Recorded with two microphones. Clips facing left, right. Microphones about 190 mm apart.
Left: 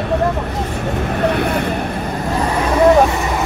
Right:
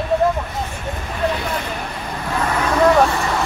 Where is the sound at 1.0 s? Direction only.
60° left (ahead or behind).